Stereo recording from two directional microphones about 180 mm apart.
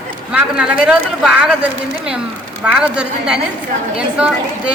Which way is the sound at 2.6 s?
10° right (ahead or behind).